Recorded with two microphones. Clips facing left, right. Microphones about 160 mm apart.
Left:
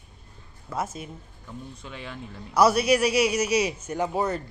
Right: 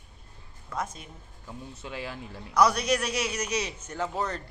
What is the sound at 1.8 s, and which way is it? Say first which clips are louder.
Speech: right 2 dB; 5° right (ahead or behind).